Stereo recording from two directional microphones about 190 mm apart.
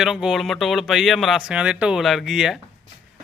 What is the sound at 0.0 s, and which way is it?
Speech, 5° right (ahead or behind).